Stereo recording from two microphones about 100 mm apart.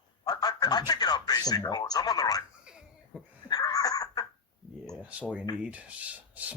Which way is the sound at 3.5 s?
40° left (ahead or behind).